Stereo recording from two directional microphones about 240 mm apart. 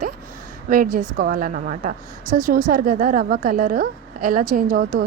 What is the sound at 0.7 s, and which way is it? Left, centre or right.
A woman's voice, right.